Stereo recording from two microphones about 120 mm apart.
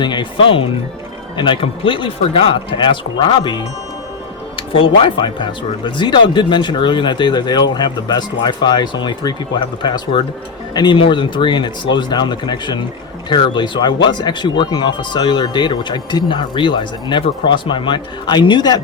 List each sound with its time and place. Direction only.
0.0 s speech: 40° left (ahead or behind)